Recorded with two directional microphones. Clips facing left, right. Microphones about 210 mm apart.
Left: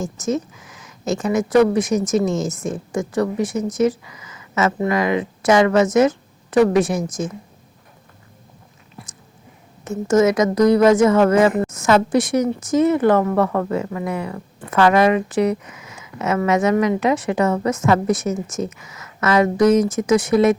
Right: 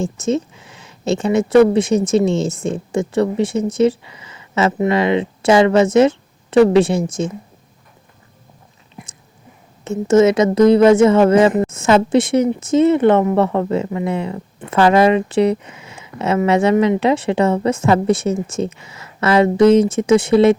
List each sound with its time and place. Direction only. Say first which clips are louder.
0.0 s speech: right 3 dB; 30° right (ahead or behind)
9.0 s biting: right 2 dB; 20° right (ahead or behind)
9.8 s speech: right 3 dB; 25° right (ahead or behind)